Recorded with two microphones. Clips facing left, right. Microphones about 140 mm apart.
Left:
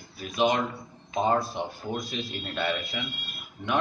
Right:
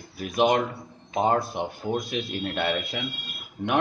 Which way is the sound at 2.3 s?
60° right (ahead or behind).